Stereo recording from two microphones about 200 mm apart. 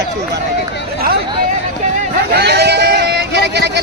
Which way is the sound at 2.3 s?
55° right (ahead or behind).